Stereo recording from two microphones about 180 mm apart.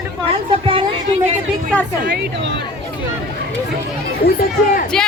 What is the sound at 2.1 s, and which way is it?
Speech, 75° right (ahead or behind).